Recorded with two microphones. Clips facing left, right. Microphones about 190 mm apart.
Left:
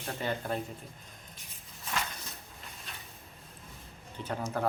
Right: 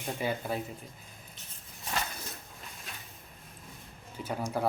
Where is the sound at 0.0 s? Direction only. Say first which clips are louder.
Right 1 dB; 10° right (ahead or behind).